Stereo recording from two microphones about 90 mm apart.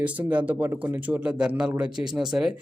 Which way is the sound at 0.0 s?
15° right (ahead or behind).